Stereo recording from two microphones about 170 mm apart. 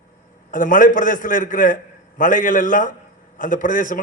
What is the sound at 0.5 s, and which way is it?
A man's voice, 50° left (ahead or behind).